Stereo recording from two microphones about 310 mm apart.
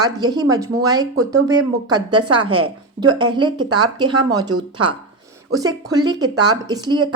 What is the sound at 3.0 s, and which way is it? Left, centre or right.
A woman's voice, centre.